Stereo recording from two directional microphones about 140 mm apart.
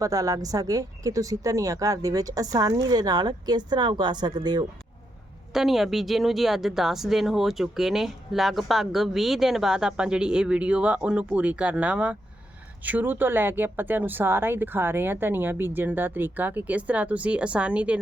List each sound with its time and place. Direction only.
0.0 s a woman's voice: 25° right (ahead or behind)
5.5 s a woman's voice: centre (ahead or behind)